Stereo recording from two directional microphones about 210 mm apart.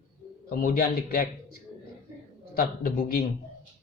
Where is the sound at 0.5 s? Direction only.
45° left (ahead or behind).